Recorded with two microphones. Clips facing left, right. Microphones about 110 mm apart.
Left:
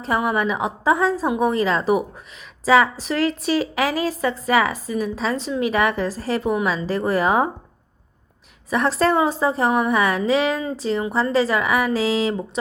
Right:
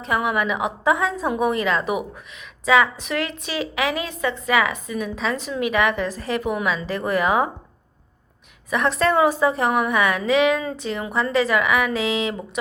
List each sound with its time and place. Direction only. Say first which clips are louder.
0.0 s a woman's voice: left 1 dB; 35° left (ahead or behind)
8.7 s a woman's voice: left 1 dB; 35° left (ahead or behind)